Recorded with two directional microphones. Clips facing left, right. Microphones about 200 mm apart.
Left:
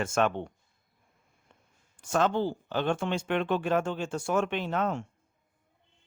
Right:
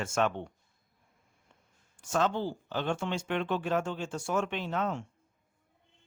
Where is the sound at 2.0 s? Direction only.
55° left (ahead or behind).